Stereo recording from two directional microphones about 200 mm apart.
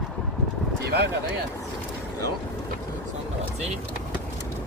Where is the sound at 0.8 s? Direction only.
55° right (ahead or behind).